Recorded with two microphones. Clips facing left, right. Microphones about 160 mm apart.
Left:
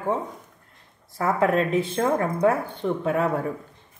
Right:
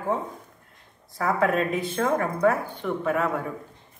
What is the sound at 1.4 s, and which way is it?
Speech, 25° left (ahead or behind).